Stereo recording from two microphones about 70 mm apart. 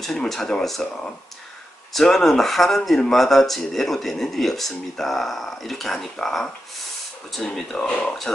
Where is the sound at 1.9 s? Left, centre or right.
Centre.